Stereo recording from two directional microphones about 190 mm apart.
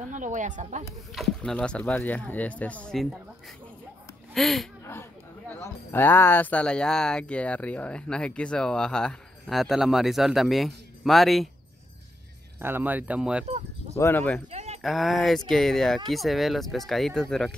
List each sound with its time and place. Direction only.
0.1 s speech: 40° right (ahead or behind)
1.1 s speech: centre (ahead or behind)
4.3 s speech: centre (ahead or behind)
12.5 s speech: 10° right (ahead or behind)
13.9 s speech: 15° left (ahead or behind)
14.5 s sheep: 35° right (ahead or behind)
14.8 s speech: centre (ahead or behind)